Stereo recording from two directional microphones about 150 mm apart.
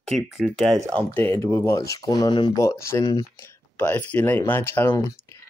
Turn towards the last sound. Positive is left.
turn(degrees=15)  # may be behind; listen again after turning